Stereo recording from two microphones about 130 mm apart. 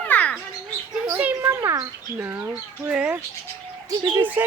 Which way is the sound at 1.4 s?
25° right (ahead or behind).